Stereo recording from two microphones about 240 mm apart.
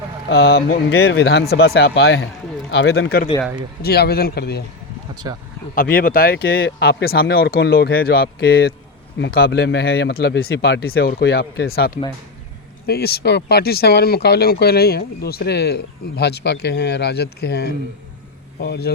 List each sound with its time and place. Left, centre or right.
0.3 s speech: left
0.9 s speech: left
5.2 s speech: centre
5.7 s speech: left